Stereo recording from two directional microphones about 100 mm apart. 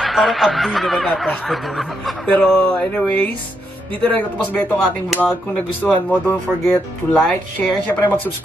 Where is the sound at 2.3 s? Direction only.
15° left (ahead or behind).